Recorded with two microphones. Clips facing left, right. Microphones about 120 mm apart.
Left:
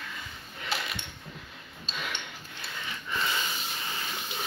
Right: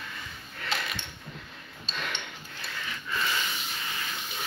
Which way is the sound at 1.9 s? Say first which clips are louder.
Right 1 dB; 10° left (ahead or behind).